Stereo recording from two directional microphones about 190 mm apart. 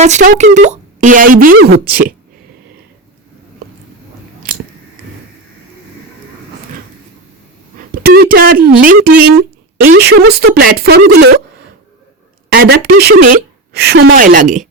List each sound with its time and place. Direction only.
0.0 s speech: 40° right (ahead or behind)
8.0 s speech: 50° right (ahead or behind)
12.5 s a woman's voice: 55° right (ahead or behind)